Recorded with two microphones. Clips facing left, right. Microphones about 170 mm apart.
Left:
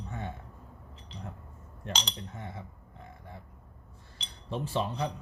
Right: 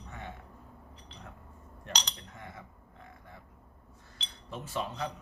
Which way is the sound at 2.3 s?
25° left (ahead or behind).